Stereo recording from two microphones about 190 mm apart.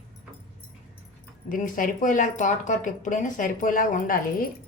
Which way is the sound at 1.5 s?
45° left (ahead or behind).